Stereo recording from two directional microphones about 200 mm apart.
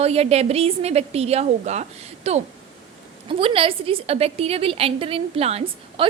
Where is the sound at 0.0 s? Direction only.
30° right (ahead or behind).